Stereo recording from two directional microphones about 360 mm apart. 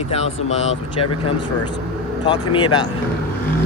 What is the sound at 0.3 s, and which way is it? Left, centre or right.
Speech, left.